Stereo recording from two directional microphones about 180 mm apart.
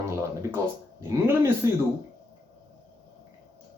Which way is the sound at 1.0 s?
15° right (ahead or behind).